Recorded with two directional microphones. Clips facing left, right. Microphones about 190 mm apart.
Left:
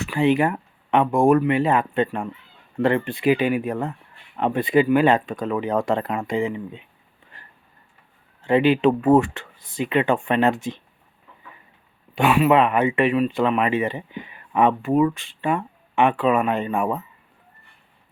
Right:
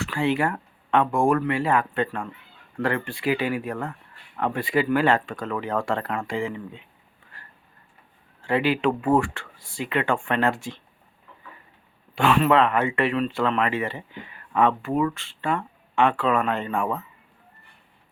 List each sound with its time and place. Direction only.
0.0 s speech: 20° left (ahead or behind)
7.3 s a sound: 20° left (ahead or behind)
8.4 s speech: 20° left (ahead or behind)
12.1 s speech: 15° left (ahead or behind)